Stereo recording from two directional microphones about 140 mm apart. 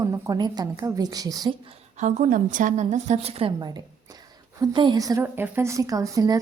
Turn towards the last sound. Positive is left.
turn(degrees=-25)  # may be behind; listen again after turning